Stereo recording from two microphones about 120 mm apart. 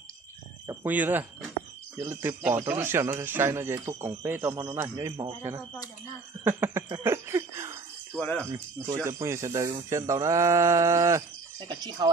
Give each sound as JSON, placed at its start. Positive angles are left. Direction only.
{"t": 0.8, "sound": "speech", "side_deg": -15}
{"t": 6.4, "sound": "speech", "side_deg": -20}
{"t": 7.0, "sound": "a sound", "side_deg": -20}
{"t": 8.2, "sound": "speech", "side_deg": 15}
{"t": 8.5, "sound": "speech", "side_deg": -25}
{"t": 11.6, "sound": "speech", "side_deg": -40}